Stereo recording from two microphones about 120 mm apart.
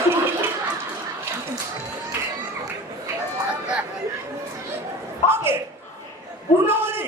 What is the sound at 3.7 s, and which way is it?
Chatter, 10° right (ahead or behind).